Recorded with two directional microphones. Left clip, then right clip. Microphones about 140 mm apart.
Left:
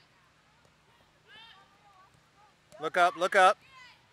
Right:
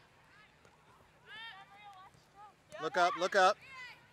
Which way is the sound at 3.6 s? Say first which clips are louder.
Right 4 dB; centre (ahead or behind).